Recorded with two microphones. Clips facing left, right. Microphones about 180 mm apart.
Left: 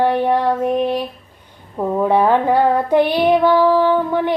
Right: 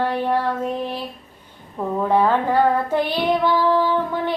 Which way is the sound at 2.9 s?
15° left (ahead or behind).